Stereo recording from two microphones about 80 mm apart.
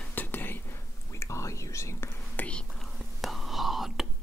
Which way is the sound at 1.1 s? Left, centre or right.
Left.